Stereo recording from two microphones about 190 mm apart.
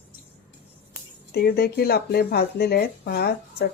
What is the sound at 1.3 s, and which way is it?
Speech, 55° left (ahead or behind).